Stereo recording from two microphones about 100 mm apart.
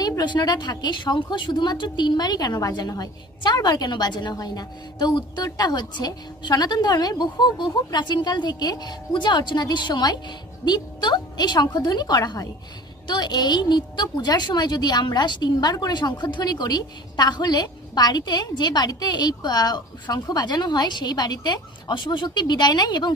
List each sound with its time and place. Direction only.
0.0 s a woman's voice: 45° left (ahead or behind)